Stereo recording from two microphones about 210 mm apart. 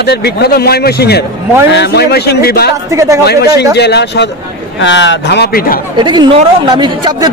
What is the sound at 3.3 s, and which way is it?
Speech, 50° left (ahead or behind).